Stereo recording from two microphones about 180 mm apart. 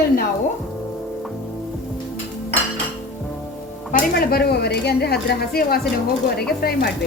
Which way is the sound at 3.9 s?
55° left (ahead or behind).